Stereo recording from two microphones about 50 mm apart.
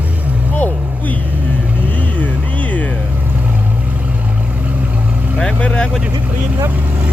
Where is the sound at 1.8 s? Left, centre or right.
Left.